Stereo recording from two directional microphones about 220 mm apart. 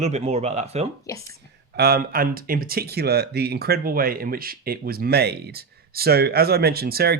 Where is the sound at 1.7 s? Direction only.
45° right (ahead or behind).